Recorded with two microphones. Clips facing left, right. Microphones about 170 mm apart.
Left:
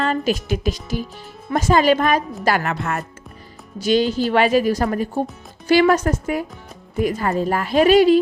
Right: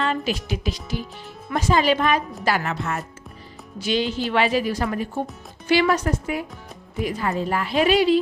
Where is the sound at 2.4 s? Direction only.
55° left (ahead or behind).